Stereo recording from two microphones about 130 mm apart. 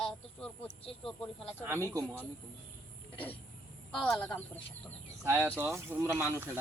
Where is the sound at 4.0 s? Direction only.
5° left (ahead or behind).